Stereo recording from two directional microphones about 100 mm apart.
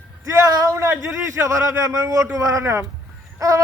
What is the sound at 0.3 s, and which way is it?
A man's voice, 40° right (ahead or behind).